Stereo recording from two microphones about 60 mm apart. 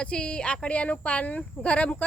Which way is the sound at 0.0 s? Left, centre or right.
Centre.